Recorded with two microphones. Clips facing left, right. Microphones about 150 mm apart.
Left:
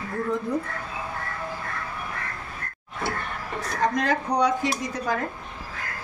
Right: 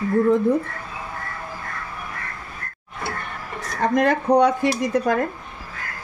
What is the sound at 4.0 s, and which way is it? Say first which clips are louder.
Speech: right 10 dB; 55° right (ahead or behind).